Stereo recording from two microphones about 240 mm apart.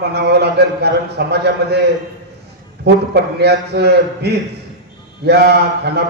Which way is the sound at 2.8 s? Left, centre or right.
Right.